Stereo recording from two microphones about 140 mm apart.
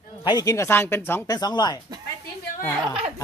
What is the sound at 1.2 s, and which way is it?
Speech, 30° left (ahead or behind).